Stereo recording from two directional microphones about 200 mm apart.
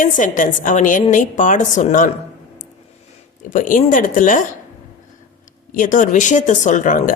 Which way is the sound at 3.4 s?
40° left (ahead or behind).